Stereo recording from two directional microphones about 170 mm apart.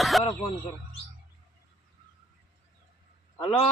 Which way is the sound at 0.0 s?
Centre (ahead or behind).